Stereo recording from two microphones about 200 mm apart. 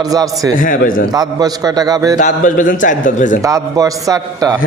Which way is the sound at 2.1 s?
40° left (ahead or behind).